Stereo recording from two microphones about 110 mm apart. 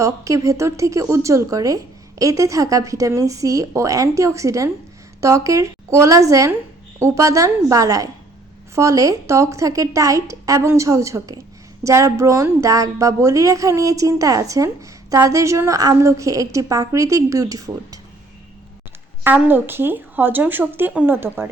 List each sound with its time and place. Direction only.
0.0 s a woman's voice: 30° right (ahead or behind)
19.2 s a woman's voice: 20° right (ahead or behind)